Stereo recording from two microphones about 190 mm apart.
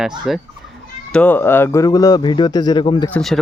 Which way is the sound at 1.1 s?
10° left (ahead or behind).